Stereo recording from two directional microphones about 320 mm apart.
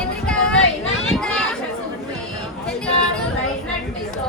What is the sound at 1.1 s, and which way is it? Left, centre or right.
Children playing, centre.